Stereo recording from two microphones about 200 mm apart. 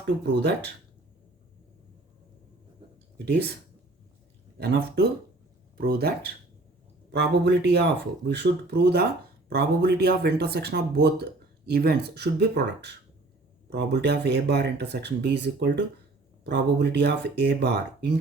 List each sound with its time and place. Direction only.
0.3 s speech: 60° right (ahead or behind)
4.5 s speech: 50° right (ahead or behind)